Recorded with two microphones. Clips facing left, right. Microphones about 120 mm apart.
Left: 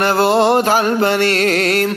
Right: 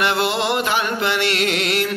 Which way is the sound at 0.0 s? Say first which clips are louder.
Left 7 dB; 35° left (ahead or behind).